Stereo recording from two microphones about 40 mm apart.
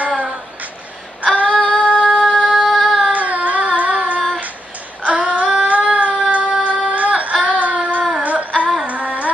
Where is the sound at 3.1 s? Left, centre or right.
Right.